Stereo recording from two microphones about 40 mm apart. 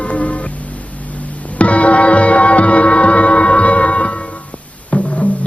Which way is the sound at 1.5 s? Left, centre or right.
Left.